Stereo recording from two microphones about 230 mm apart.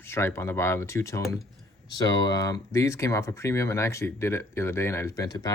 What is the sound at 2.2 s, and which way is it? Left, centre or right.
Speech, centre.